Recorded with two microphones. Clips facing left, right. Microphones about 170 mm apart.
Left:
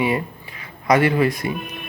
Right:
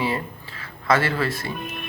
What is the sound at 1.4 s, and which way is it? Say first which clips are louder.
Speech: left 6 dB; 15° left (ahead or behind).